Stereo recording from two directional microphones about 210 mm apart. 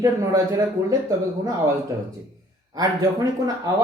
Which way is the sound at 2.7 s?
20° right (ahead or behind).